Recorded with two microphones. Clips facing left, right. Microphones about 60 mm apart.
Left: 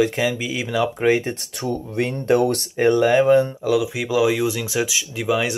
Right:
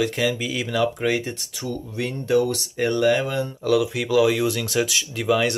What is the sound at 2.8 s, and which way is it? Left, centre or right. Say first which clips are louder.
Speech: left 4 dB; left.